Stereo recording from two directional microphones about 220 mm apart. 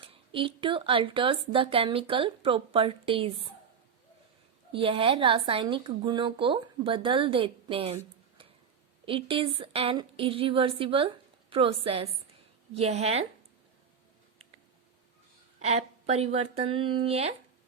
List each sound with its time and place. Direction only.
0.0 s speech: 25° right (ahead or behind)
4.7 s speech: 25° right (ahead or behind)
9.0 s speech: 25° right (ahead or behind)
15.6 s speech: 30° right (ahead or behind)